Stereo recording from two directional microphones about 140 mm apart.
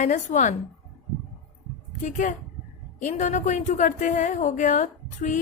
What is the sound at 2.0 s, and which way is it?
A woman's voice, 65° left (ahead or behind).